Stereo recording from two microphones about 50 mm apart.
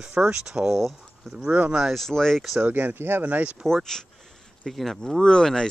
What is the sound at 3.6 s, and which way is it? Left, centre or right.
Speech, centre.